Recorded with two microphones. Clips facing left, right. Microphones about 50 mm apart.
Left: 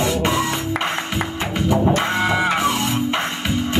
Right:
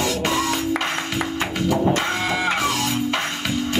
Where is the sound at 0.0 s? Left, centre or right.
Left.